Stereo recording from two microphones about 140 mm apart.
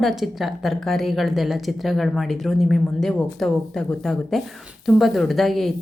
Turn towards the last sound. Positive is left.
turn(degrees=0)  # may be behind; listen again after turning